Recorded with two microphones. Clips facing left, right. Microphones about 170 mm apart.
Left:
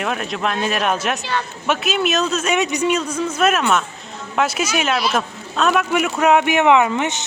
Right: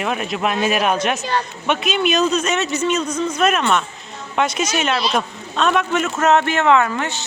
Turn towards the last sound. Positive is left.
turn(degrees=20)  # may be behind; listen again after turning